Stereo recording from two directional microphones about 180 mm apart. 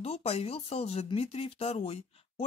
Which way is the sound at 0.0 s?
35° left (ahead or behind).